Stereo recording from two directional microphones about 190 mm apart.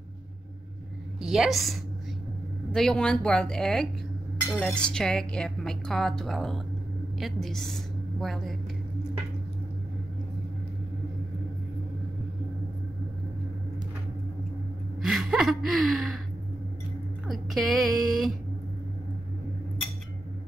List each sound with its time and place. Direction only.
1.2 s a woman's voice: centre (ahead or behind)
15.0 s gasp: 5° right (ahead or behind)
17.3 s speech: centre (ahead or behind)